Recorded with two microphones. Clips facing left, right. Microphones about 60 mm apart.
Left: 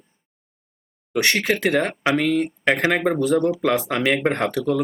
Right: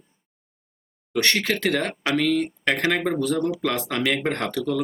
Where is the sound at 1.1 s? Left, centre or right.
Centre.